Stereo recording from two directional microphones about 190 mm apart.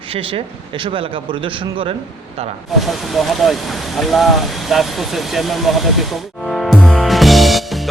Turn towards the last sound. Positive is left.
turn(degrees=0)  # may be behind; listen again after turning